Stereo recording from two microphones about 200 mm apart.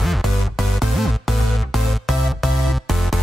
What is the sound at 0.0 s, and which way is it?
Music, centre (ahead or behind).